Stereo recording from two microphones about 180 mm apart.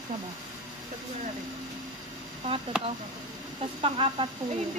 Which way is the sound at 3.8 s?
30° right (ahead or behind).